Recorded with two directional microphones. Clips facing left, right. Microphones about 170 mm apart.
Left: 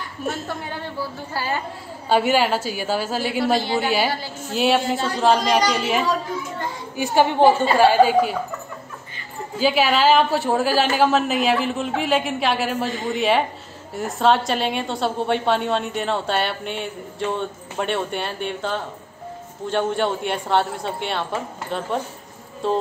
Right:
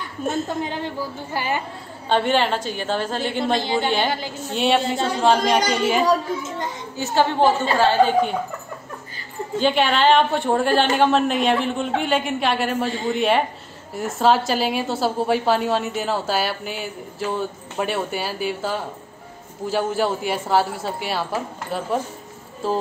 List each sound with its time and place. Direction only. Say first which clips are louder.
0.3 s a woman's voice: right 5 dB; 20° right (ahead or behind)
2.0 s a woman's voice: left 1 dB; 5° left (ahead or behind)
7.0 s a woman's voice: left 2 dB; 15° left (ahead or behind)
9.6 s a woman's voice: even; 5° left (ahead or behind)